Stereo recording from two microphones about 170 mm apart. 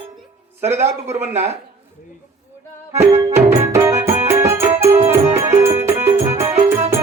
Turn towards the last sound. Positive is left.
turn(degrees=-15)  # may be behind; listen again after turning